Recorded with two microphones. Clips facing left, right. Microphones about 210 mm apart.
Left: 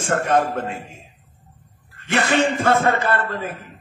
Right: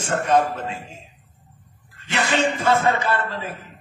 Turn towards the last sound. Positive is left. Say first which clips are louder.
# left 2 dB
turn(degrees=50)  # may be behind; listen again after turning